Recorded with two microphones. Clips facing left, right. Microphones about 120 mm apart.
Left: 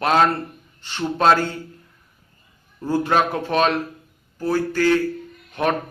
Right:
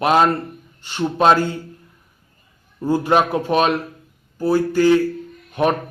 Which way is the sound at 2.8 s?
15° right (ahead or behind).